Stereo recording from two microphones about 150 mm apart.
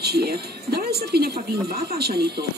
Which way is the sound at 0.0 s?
90° right.